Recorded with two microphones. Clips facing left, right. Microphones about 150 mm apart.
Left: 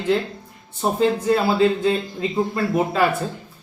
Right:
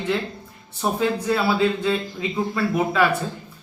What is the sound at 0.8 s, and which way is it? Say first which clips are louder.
A man's voice: left 3 dB; 35° left (ahead or behind).